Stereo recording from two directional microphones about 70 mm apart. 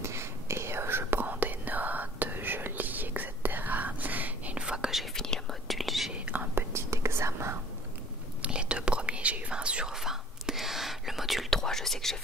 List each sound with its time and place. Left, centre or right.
0.0 s whispering: right
4.6 s whispering: centre
5.1 s whispering: centre
6.1 s whispering: centre
6.5 s whispering: right
8.4 s whispering: centre
9.9 s whispering: centre